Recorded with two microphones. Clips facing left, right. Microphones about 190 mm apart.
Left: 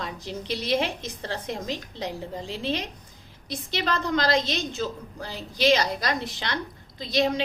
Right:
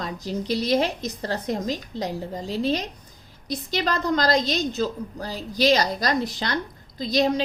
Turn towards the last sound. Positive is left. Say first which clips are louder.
# right 3 dB
turn(degrees=-40)  # may be behind; listen again after turning